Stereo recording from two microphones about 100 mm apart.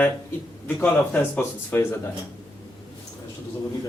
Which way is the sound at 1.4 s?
20° left (ahead or behind).